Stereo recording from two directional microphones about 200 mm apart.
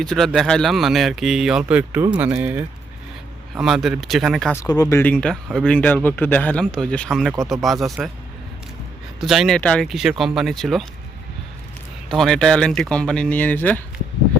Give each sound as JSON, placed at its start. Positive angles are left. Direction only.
{"t": 0.0, "sound": "speech", "side_deg": 5}
{"t": 4.5, "sound": "speech", "side_deg": 20}
{"t": 9.2, "sound": "speech", "side_deg": 0}
{"t": 12.0, "sound": "speech", "side_deg": 0}